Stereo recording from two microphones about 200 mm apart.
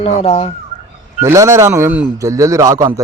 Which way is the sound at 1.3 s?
15° right (ahead or behind).